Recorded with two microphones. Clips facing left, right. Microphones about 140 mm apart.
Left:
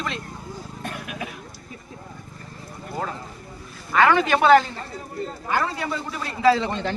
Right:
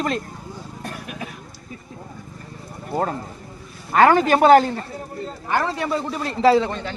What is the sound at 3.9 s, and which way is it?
A man's voice, 40° right (ahead or behind).